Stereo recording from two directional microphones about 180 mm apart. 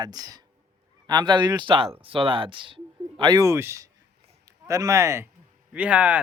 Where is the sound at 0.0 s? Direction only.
20° right (ahead or behind).